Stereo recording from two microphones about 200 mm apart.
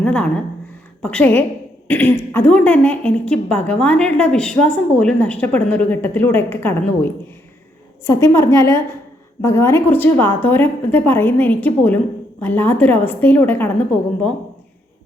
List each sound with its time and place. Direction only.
0.0 s speech: 5° left (ahead or behind)